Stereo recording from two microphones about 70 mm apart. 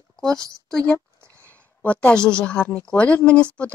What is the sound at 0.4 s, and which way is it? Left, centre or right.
Speech, centre.